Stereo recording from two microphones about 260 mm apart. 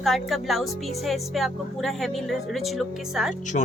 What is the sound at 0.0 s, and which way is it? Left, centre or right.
Speech, centre.